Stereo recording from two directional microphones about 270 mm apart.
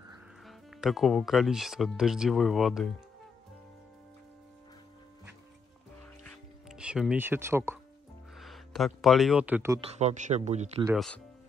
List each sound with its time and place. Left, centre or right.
0.5 s speech: centre
6.2 s music: centre
8.4 s speech: centre
9.9 s a man's voice: right